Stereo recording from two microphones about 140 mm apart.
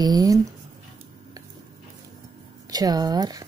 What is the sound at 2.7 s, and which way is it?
Speech, 30° right (ahead or behind).